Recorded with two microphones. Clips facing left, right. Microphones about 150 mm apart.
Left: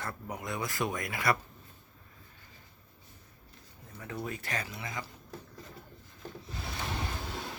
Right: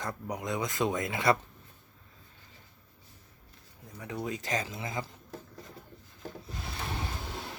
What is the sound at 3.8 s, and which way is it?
Speech, 15° right (ahead or behind).